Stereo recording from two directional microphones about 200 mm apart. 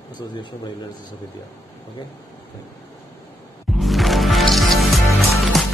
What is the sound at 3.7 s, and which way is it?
Music, centre (ahead or behind).